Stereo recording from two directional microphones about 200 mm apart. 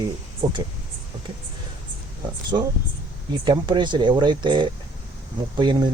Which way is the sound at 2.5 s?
20° right (ahead or behind).